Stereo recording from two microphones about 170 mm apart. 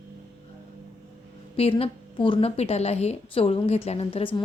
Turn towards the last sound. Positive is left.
turn(degrees=30)  # may be behind; listen again after turning